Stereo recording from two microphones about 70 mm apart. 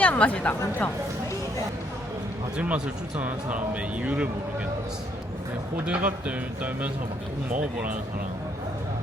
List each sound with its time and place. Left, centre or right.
0.0 s a woman's voice: left
2.6 s a man's voice: centre
5.7 s a man's voice: centre